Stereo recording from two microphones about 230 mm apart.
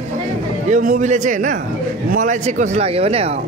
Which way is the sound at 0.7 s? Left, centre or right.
Right.